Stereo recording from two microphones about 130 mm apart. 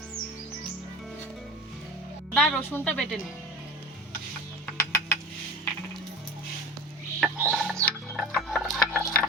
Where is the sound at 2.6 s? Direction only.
15° left (ahead or behind).